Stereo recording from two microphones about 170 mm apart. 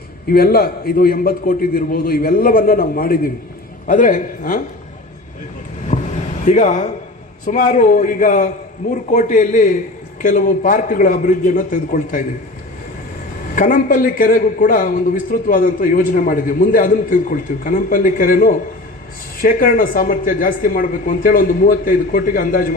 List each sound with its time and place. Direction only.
0.3 s a man's voice: 60° left (ahead or behind)
5.9 s a sound: 45° left (ahead or behind)
6.4 s a man's voice: 45° left (ahead or behind)
13.6 s a man's voice: 50° left (ahead or behind)